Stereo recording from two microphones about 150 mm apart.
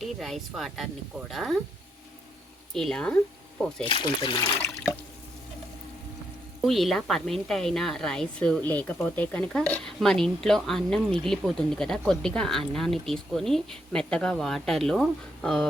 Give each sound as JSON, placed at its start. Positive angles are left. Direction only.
{"t": 0.0, "sound": "a woman's voice", "side_deg": 0}
{"t": 2.7, "sound": "a woman's voice", "side_deg": 5}
{"t": 3.8, "sound": "speech", "side_deg": 35}
{"t": 6.6, "sound": "a woman's voice", "side_deg": 0}